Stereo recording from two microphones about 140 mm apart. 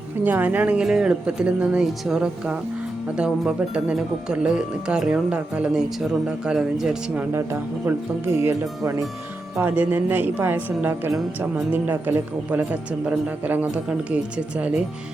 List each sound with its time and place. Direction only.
0.3 s speech: 10° right (ahead or behind)
7.9 s speech: 15° right (ahead or behind)